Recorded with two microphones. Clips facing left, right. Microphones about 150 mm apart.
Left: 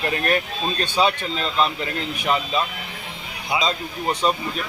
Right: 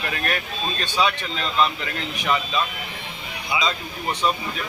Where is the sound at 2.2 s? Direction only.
35° left (ahead or behind).